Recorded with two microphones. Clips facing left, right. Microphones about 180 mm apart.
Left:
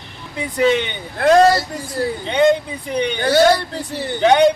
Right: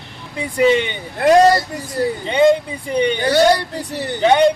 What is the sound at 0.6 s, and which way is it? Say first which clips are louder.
A man's voice: right 2 dB; 5° right (ahead or behind).